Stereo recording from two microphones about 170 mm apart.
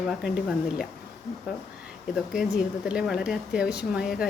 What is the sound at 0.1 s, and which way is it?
Speech, centre (ahead or behind).